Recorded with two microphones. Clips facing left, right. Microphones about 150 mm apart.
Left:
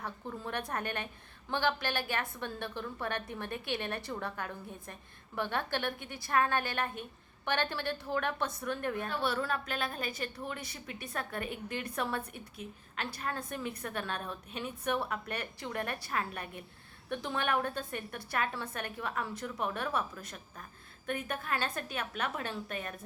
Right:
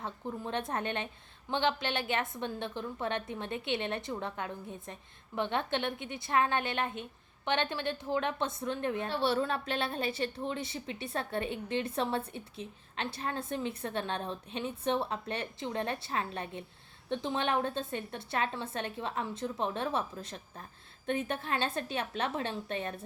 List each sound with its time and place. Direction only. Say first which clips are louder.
0.0 s a woman's voice: right 2 dB; 20° right (ahead or behind)